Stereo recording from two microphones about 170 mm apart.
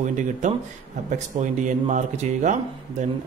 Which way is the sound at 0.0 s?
45° right (ahead or behind).